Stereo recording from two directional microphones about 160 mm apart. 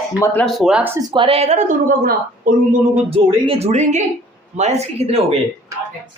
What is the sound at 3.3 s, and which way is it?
A woman's voice, 35° right (ahead or behind).